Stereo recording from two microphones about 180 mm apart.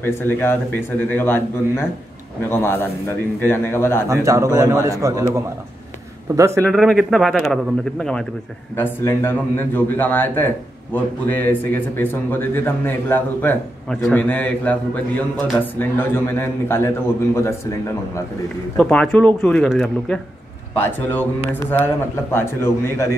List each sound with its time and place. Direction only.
0.0 s a man's voice: 10° left (ahead or behind)
4.1 s a man's voice: 15° right (ahead or behind)
6.6 s a man's voice: centre (ahead or behind)
18.8 s a man's voice: 5° left (ahead or behind)